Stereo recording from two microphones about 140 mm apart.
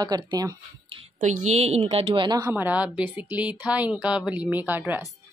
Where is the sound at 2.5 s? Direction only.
10° right (ahead or behind).